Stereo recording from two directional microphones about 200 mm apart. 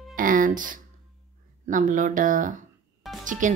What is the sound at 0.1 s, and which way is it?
Music, 45° right (ahead or behind).